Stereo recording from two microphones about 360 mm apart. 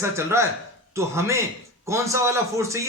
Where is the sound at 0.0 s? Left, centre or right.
Centre.